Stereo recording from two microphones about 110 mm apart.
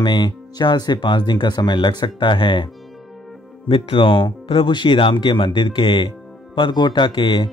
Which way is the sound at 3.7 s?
55° left (ahead or behind).